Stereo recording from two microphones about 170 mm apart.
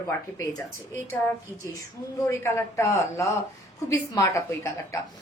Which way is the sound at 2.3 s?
15° left (ahead or behind).